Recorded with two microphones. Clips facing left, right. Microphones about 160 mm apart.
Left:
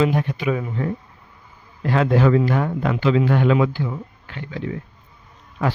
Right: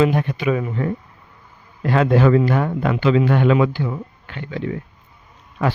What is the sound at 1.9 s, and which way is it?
Speech, 65° right (ahead or behind).